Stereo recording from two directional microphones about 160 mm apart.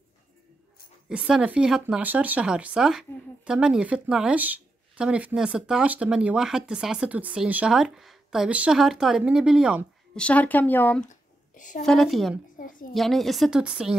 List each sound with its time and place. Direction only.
1.0 s speech: 5° right (ahead or behind)
10.1 s speech: 10° left (ahead or behind)
11.1 s a sound: 55° left (ahead or behind)
11.8 s speech: centre (ahead or behind)
12.5 s a sound: 60° left (ahead or behind)
12.9 s speech: centre (ahead or behind)